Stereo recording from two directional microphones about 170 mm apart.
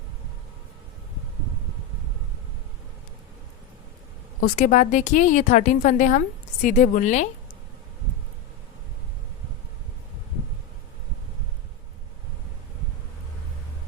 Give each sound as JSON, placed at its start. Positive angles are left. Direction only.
{"t": 4.4, "sound": "a woman's voice", "side_deg": 50}